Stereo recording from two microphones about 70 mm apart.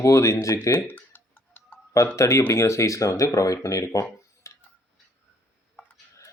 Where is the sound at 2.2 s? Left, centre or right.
Left.